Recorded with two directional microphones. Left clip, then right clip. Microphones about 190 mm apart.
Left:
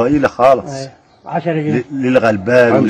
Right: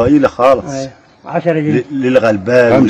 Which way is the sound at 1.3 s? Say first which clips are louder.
Right 3 dB; 40° right (ahead or behind).